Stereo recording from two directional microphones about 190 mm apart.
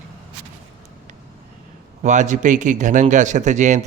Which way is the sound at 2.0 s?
40° right (ahead or behind).